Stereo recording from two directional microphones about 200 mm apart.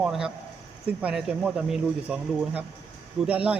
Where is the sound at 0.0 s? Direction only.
5° right (ahead or behind).